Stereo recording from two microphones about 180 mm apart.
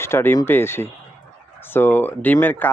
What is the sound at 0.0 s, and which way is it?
Speech, 15° left (ahead or behind).